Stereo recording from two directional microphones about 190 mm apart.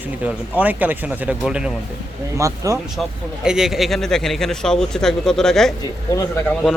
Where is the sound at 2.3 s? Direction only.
15° right (ahead or behind).